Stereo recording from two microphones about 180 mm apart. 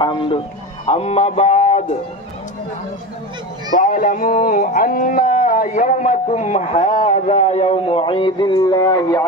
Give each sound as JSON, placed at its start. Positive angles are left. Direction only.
{"t": 0.0, "sound": "speech", "side_deg": 25}
{"t": 3.7, "sound": "speech", "side_deg": 50}